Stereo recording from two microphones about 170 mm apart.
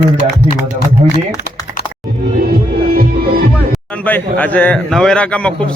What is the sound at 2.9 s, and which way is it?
Music, 60° right (ahead or behind).